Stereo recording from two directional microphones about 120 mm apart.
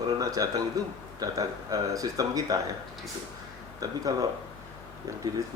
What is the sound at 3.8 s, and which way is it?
Speech, 30° right (ahead or behind).